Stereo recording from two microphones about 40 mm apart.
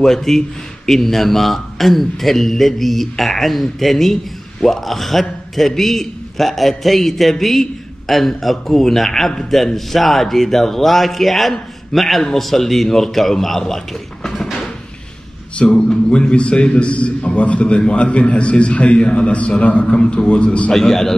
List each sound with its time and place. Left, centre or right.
0.0 s speech: centre
14.2 s a sound: centre
15.5 s a man's voice: left
20.7 s a man's voice: centre